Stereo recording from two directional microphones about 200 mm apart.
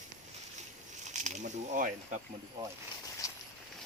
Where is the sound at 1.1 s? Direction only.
35° right (ahead or behind).